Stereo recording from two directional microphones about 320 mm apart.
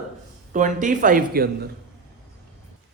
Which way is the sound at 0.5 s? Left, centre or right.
Right.